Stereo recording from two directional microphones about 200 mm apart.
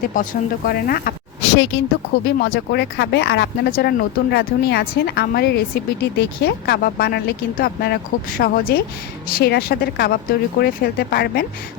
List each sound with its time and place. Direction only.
0.1 s speech: 45° left (ahead or behind)